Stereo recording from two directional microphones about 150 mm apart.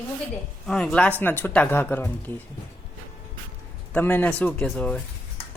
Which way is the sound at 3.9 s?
10° left (ahead or behind).